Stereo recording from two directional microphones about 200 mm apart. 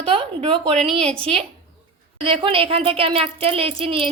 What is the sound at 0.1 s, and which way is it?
A woman's voice, 30° right (ahead or behind).